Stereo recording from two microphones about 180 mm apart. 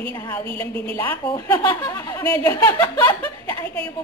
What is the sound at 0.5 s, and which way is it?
Speech, 30° right (ahead or behind).